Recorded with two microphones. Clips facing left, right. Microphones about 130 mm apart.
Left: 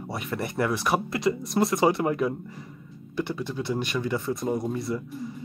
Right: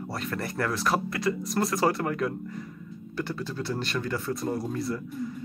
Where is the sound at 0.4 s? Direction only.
20° left (ahead or behind).